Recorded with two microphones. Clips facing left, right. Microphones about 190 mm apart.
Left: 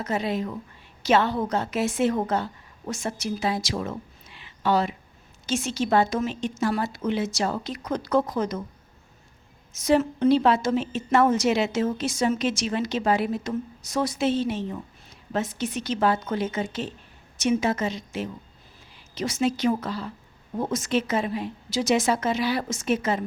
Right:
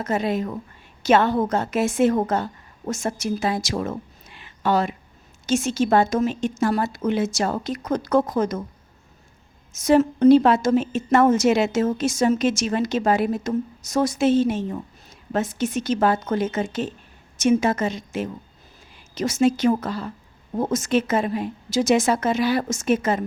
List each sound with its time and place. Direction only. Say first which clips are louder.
0.0 s a woman's voice: right 3 dB; 50° right (ahead or behind)
9.7 s a woman's voice: right 4 dB; 45° right (ahead or behind)